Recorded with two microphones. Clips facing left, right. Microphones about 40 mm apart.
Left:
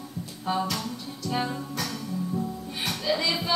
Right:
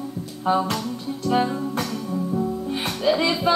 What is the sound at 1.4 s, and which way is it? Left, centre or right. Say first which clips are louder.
Music: right 6 dB; centre.